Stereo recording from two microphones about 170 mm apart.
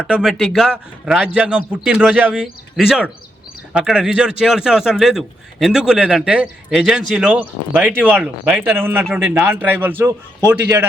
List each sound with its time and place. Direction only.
0.1 s a man's voice: 5° right (ahead or behind)